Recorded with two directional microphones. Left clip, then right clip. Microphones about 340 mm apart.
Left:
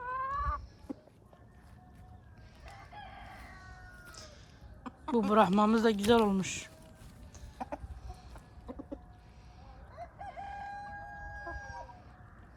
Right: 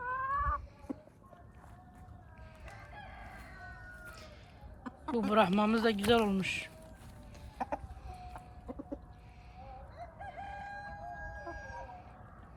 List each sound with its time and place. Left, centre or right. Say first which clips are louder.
0.0 s chicken: right 1 dB; centre
4.0 s a sound: right 1 dB; centre
4.8 s speech: left 3 dB; centre
7.6 s chicken: right 4 dB; centre
10.5 s crowing: left 2 dB; centre